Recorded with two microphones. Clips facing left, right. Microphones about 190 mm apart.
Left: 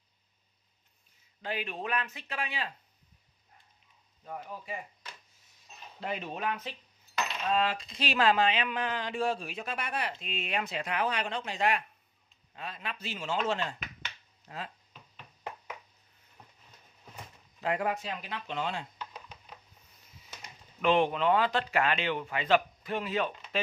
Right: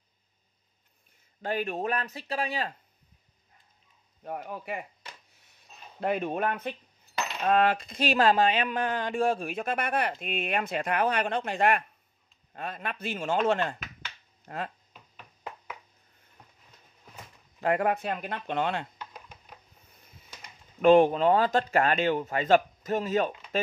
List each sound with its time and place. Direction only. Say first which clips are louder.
1.4 s speech: right 6 dB; 45° right (ahead or behind)
4.2 s speech: right 5 dB; 65° right (ahead or behind)
5.4 s a sound: even; 60° right (ahead or behind)
7.4 s speech: right 7 dB; 55° right (ahead or behind)
14.4 s a sound: right 6 dB; 55° right (ahead or behind)
17.6 s speech: right 5 dB; 55° right (ahead or behind)
20.8 s speech: right 7 dB; 45° right (ahead or behind)